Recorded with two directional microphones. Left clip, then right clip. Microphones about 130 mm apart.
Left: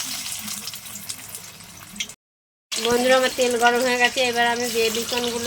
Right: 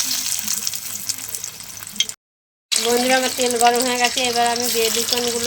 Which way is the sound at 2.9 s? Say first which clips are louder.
Left 1 dB; 5° left (ahead or behind).